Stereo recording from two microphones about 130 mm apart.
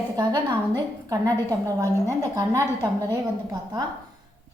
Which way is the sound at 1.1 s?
25° right (ahead or behind).